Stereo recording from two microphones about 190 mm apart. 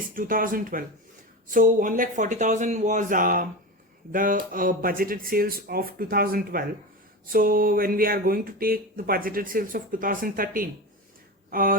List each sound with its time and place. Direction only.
0.1 s speech: 45° right (ahead or behind)